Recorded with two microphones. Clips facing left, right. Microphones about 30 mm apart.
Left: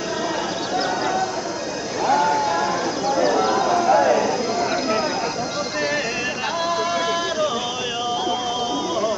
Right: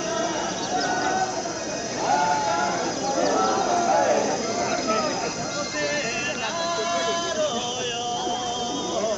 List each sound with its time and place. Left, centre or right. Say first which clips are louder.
0.7 s clip-clop: left 2 dB; left
2.0 s horse: left 3 dB; left
6.9 s a sound: left 3 dB; centre